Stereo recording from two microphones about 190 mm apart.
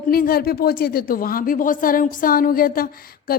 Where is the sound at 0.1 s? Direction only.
50° left (ahead or behind).